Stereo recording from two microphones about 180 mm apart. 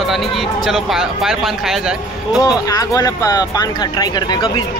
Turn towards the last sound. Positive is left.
turn(degrees=25)  # may be behind; listen again after turning